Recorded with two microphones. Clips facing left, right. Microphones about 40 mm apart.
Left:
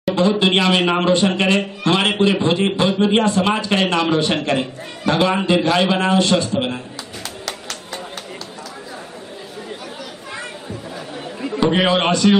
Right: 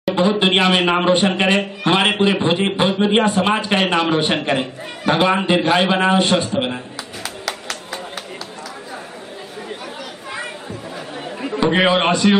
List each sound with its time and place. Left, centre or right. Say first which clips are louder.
0.1 s a man's voice: even; right
3.4 s a man's voice: right 1 dB; right
4.6 s a man's voice: even; centre
5.5 s a man's voice: even; right
6.5 s a man's voice: even; centre
7.2 s clapping: right 3 dB; centre
11.4 s a man's voice: right 1 dB; centre